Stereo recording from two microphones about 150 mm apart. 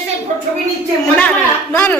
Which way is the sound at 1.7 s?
10° left (ahead or behind).